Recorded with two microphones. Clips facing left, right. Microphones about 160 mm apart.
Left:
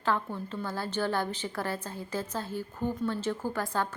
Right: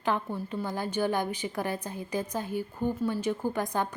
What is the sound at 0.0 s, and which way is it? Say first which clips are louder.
A woman's voice: right 1 dB; 15° right (ahead or behind).